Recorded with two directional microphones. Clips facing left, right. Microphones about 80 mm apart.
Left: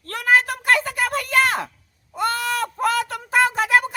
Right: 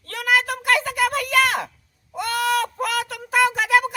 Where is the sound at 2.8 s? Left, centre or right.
Left.